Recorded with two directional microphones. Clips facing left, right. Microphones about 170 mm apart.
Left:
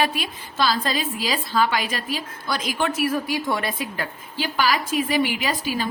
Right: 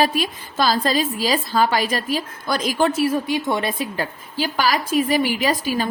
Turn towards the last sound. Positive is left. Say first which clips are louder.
# right 4 dB
turn(degrees=-45)  # may be behind; listen again after turning